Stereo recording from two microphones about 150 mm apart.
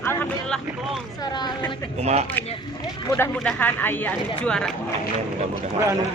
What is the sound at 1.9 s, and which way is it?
Speech, 45° right (ahead or behind).